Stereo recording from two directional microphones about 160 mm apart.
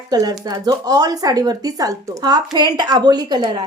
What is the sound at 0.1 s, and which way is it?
Speech, 25° right (ahead or behind).